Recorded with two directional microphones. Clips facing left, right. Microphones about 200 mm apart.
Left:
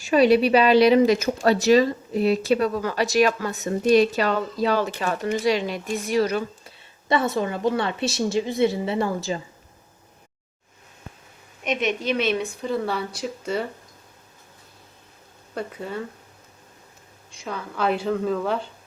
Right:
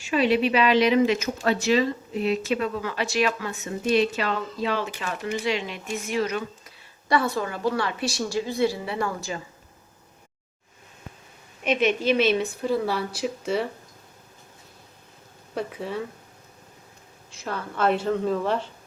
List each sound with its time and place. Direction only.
0.0 s speech: 40° left (ahead or behind)
7.1 s a woman's voice: 20° left (ahead or behind)
11.6 s a woman's voice: 5° right (ahead or behind)
15.5 s a woman's voice: centre (ahead or behind)
17.4 s a woman's voice: centre (ahead or behind)